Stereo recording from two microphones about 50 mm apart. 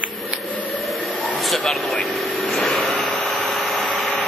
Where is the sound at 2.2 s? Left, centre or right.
Centre.